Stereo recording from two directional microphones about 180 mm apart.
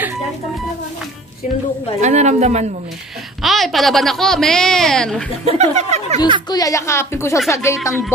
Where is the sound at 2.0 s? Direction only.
40° right (ahead or behind).